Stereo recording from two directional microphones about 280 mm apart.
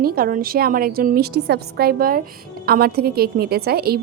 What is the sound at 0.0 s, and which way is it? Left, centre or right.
A woman's voice, right.